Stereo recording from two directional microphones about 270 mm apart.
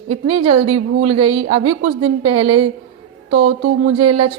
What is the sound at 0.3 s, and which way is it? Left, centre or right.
Speech, right.